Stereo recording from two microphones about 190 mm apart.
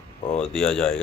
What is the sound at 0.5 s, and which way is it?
Speech, 5° left (ahead or behind).